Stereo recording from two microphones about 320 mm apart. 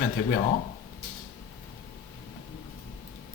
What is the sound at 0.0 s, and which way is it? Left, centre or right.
Speech, left.